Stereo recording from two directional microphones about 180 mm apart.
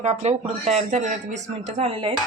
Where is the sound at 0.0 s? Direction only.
35° right (ahead or behind).